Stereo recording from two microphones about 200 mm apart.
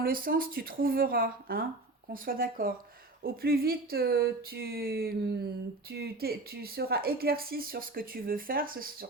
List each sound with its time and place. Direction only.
0.0 s a woman's voice: 45° right (ahead or behind)